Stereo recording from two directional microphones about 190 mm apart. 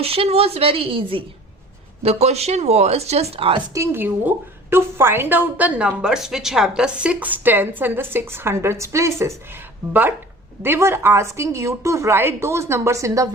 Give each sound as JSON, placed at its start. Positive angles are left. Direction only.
{"t": 0.0, "sound": "a woman's voice", "side_deg": -30}
{"t": 3.8, "sound": "a woman's voice", "side_deg": -10}